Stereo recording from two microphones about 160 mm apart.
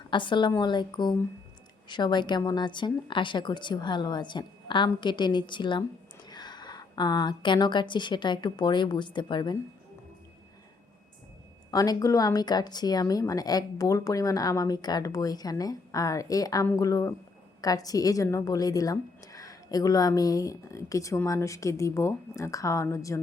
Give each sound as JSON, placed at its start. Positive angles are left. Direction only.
{"t": 0.1, "sound": "a woman's voice", "side_deg": 30}
{"t": 11.7, "sound": "a woman's voice", "side_deg": 25}